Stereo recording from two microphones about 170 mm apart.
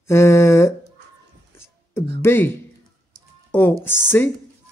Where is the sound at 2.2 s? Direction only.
15° left (ahead or behind).